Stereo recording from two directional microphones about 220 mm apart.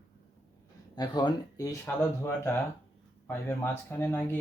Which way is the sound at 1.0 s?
20° left (ahead or behind).